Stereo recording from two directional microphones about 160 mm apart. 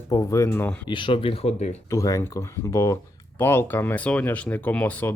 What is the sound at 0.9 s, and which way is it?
Speech, 30° left (ahead or behind).